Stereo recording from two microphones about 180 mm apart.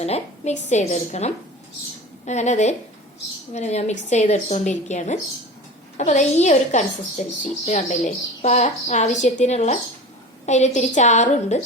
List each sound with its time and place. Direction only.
0.0 s a woman's voice: 35° left (ahead or behind)